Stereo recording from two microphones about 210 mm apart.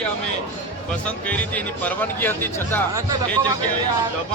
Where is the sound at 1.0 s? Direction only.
5° left (ahead or behind).